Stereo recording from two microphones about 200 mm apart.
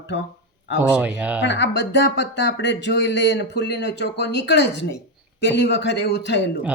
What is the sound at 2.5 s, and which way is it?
Speech, 60° left (ahead or behind).